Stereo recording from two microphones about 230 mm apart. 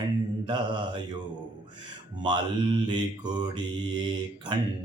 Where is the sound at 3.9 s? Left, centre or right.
Centre.